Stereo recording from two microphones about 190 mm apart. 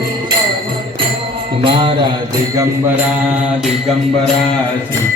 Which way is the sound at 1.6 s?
25° right (ahead or behind).